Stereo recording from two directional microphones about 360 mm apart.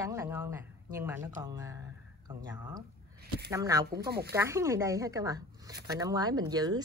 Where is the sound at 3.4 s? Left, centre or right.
Centre.